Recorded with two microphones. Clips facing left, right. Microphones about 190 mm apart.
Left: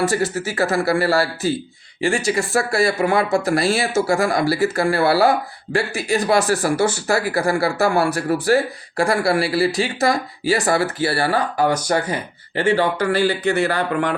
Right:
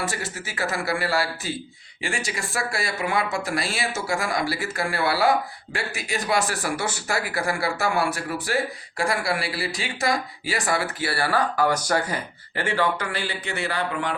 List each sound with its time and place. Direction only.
0.4 s speech: 35° left (ahead or behind)
13.1 s speech: 45° left (ahead or behind)